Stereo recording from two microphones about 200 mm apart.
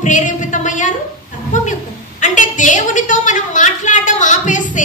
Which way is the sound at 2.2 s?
40° left (ahead or behind).